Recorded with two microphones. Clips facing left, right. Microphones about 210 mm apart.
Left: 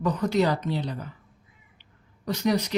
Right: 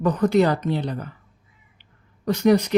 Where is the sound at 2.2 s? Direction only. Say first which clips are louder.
Right 7 dB; 55° right (ahead or behind).